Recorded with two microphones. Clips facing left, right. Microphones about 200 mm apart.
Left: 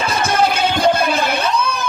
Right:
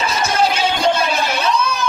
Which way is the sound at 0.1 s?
55° left (ahead or behind).